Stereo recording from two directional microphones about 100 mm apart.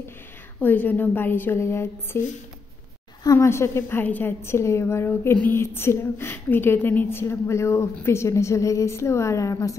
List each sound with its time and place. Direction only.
0.6 s a woman's voice: 15° left (ahead or behind)
3.3 s a woman's voice: 25° left (ahead or behind)